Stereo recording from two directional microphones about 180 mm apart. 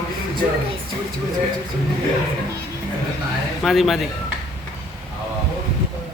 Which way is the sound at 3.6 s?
Centre (ahead or behind).